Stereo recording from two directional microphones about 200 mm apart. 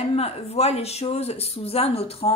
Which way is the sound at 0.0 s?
30° left (ahead or behind).